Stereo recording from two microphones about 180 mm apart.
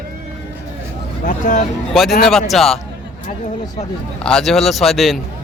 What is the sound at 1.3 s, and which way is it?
Speech, 45° left (ahead or behind).